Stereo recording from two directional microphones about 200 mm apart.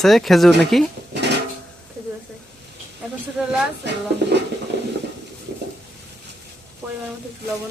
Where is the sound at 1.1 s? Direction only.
60° right (ahead or behind).